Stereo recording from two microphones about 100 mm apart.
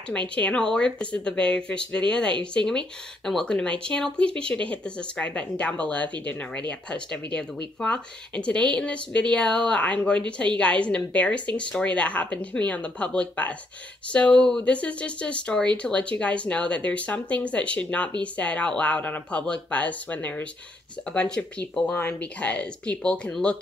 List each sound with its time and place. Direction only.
0.4 s speech: 10° left (ahead or behind)